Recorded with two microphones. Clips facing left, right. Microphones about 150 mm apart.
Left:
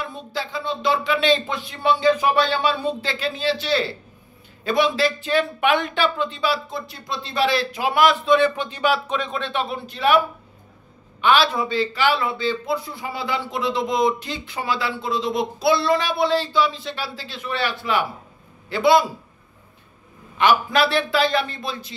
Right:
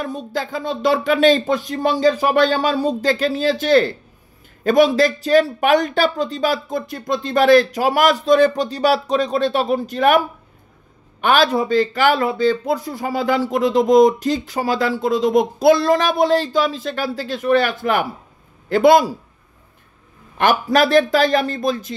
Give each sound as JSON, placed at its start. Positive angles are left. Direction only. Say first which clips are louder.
{"t": 0.0, "sound": "a man's voice", "louder": "right 5 dB", "side_deg": -45}
{"t": 20.3, "sound": "a man's voice", "louder": "right 3 dB", "side_deg": -45}